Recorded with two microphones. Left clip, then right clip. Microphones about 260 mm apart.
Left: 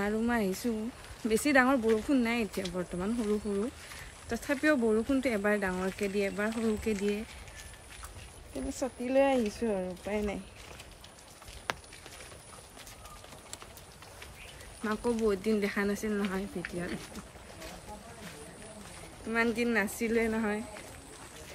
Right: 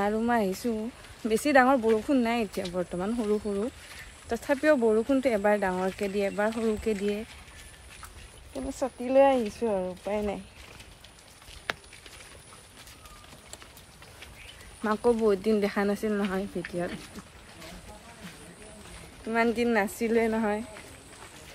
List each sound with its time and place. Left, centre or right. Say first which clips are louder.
0.0 s speech: right 5 dB; centre
4.3 s speech: right 5 dB; centre
8.6 s speech: right 4 dB; centre
11.7 s a sound: right 2 dB; centre
14.9 s speech: right 6 dB; centre
19.3 s speech: right 4 dB; centre